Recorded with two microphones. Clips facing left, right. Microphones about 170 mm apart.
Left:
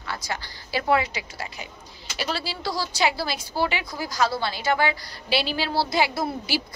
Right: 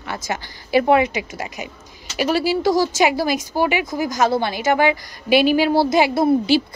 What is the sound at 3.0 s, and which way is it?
A woman's voice, 15° right (ahead or behind).